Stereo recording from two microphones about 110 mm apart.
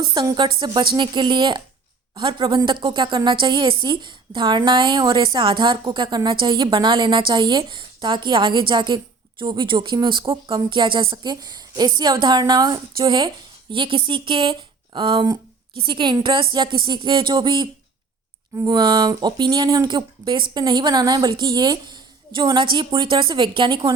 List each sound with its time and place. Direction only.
0.1 s a woman's voice: 45° right (ahead or behind)